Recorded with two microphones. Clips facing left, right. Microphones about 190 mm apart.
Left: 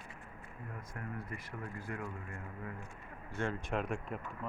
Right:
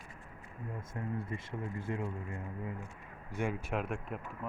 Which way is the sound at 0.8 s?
25° right (ahead or behind).